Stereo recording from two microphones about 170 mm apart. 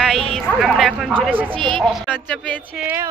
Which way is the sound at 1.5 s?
30° right (ahead or behind).